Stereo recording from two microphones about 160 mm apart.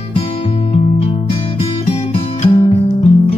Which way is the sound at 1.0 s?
40° left (ahead or behind).